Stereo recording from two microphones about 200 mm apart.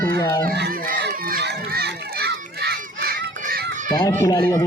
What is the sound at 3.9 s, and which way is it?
Speech, 20° left (ahead or behind).